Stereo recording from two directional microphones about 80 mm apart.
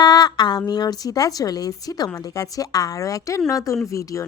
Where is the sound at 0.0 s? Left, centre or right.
Left.